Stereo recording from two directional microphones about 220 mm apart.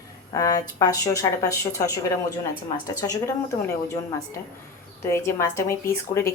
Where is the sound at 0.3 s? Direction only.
15° left (ahead or behind).